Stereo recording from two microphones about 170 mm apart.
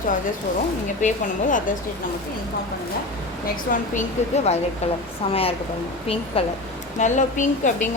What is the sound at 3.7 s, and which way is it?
Speech, 55° left (ahead or behind).